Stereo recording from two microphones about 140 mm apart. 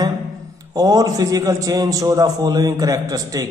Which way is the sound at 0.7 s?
25° right (ahead or behind).